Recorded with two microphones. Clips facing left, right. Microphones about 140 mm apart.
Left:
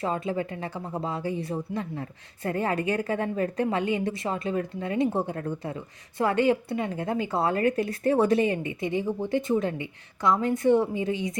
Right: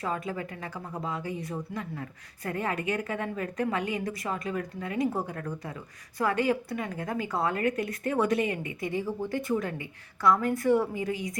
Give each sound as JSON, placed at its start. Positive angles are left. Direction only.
{"t": 0.0, "sound": "speech", "side_deg": 25}